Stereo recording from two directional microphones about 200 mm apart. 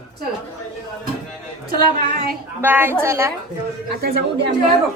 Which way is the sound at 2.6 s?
10° right (ahead or behind).